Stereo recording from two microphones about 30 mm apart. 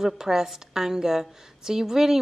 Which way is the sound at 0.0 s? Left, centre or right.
Centre.